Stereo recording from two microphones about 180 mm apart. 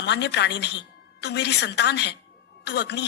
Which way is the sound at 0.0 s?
70° left (ahead or behind).